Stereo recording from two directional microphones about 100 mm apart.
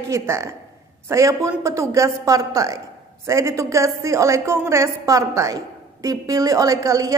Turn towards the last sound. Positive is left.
turn(degrees=-35)  # may be behind; listen again after turning